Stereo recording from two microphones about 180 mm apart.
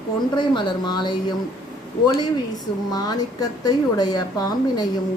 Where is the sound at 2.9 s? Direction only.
20° left (ahead or behind).